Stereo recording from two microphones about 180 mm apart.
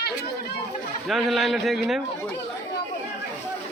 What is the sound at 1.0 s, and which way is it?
Speech, centre (ahead or behind).